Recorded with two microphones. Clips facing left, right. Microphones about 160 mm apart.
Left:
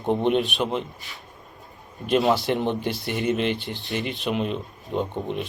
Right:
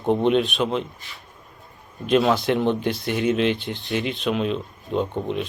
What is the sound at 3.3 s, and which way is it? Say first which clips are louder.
Speech: right 2 dB; 65° right (ahead or behind).